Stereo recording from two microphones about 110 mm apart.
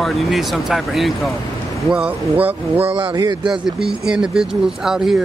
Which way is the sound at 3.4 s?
5° right (ahead or behind).